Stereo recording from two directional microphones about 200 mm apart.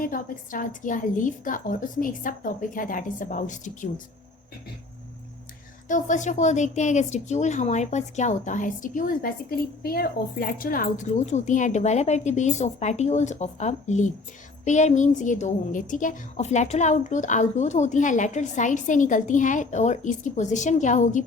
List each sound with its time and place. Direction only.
0.0 s a woman's voice: 45° left (ahead or behind)
5.9 s a woman's voice: 40° left (ahead or behind)